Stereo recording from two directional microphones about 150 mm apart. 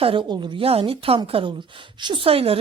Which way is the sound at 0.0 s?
35° right (ahead or behind).